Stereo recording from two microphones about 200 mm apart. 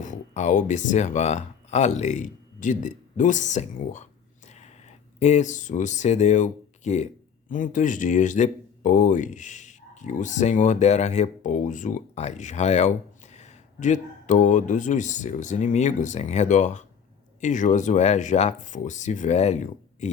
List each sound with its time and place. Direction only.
0.0 s speech: 40° left (ahead or behind)
4.4 s gasp: 35° left (ahead or behind)
5.2 s speech: 35° left (ahead or behind)